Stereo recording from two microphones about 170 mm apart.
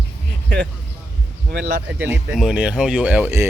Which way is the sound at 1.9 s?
10° right (ahead or behind).